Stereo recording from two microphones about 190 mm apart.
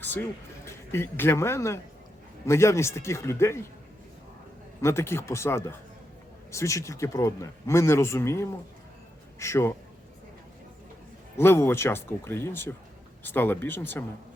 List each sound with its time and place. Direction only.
0.0 s speech: 10° left (ahead or behind)
4.8 s speech: 15° left (ahead or behind)
11.3 s speech: 15° left (ahead or behind)